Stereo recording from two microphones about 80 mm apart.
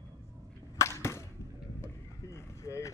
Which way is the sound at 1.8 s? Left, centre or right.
Left.